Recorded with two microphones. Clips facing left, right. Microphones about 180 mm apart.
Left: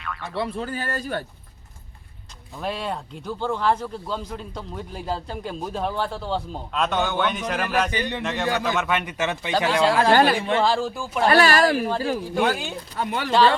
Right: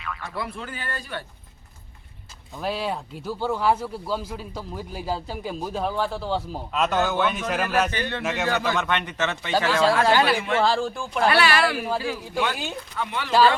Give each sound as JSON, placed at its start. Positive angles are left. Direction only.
{"t": 0.0, "sound": "boing", "side_deg": 0}
{"t": 0.3, "sound": "speech", "side_deg": 35}
{"t": 2.6, "sound": "speech", "side_deg": 0}
{"t": 7.9, "sound": "speech", "side_deg": 15}
{"t": 8.2, "sound": "speech", "side_deg": -5}
{"t": 10.1, "sound": "speech", "side_deg": 45}
{"t": 10.3, "sound": "speech", "side_deg": 30}
{"t": 10.6, "sound": "speech", "side_deg": 5}
{"t": 11.3, "sound": "speech", "side_deg": 40}
{"t": 11.8, "sound": "speech", "side_deg": -5}
{"t": 12.9, "sound": "speech", "side_deg": 40}